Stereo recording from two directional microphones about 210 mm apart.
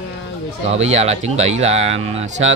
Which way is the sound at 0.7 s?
30° right (ahead or behind).